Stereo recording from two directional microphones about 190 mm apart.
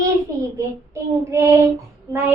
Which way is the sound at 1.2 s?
15° right (ahead or behind).